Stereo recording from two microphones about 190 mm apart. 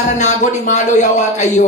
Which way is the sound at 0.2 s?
40° left (ahead or behind).